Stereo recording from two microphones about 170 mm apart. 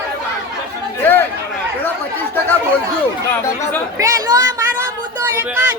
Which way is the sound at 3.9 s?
20° right (ahead or behind).